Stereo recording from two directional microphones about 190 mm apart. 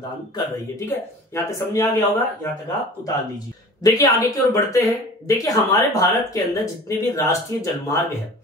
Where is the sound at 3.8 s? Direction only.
20° left (ahead or behind).